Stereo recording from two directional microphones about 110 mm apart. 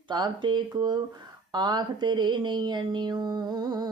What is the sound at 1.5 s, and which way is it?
A woman's voice, 40° right (ahead or behind).